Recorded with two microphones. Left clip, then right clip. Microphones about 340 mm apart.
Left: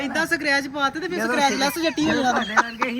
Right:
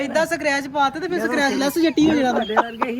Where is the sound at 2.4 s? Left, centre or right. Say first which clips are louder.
Right 1 dB; centre.